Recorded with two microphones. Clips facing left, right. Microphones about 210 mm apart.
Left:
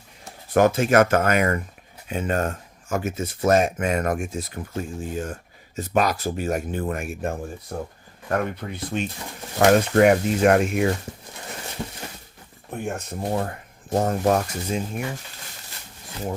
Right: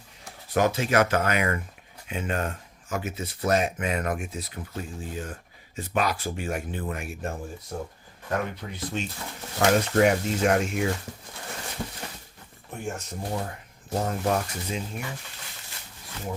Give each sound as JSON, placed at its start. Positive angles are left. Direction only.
{"t": 0.5, "sound": "speech", "side_deg": 50}
{"t": 12.7, "sound": "speech", "side_deg": 60}
{"t": 13.9, "sound": "speech", "side_deg": 45}